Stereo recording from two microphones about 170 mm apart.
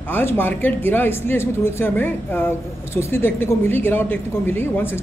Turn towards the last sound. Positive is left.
turn(degrees=15)  # may be behind; listen again after turning